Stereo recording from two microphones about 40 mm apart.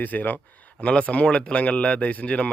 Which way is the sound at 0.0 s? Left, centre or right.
Left.